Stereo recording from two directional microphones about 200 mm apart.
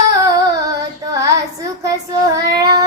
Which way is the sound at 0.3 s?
20° right (ahead or behind).